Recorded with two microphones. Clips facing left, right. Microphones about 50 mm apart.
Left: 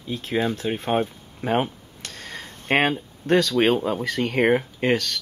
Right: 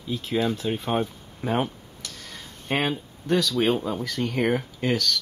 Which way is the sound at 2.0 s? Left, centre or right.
Left.